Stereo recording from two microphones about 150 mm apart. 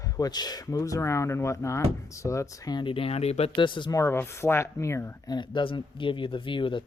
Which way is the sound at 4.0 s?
15° left (ahead or behind).